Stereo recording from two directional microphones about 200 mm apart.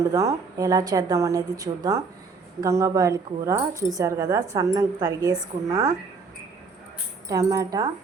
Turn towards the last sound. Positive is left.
turn(degrees=-15)  # may be behind; listen again after turning